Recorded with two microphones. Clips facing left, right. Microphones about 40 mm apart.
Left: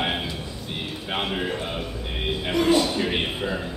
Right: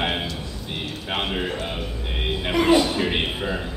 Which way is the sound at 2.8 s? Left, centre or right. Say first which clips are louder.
Right 2 dB; centre.